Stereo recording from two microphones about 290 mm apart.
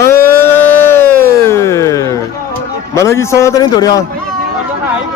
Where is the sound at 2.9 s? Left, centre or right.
Centre.